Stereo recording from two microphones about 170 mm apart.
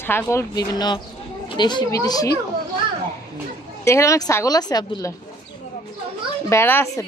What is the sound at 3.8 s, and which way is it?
A woman's voice, 15° left (ahead or behind).